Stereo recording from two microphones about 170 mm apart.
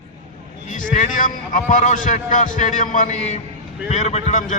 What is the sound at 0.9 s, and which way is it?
A man's voice, 50° left (ahead or behind).